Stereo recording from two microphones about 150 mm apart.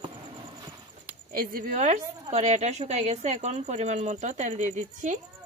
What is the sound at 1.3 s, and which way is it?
A woman's voice, 80° right.